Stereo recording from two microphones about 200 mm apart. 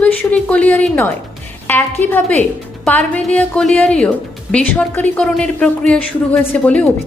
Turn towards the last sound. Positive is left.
turn(degrees=5)  # may be behind; listen again after turning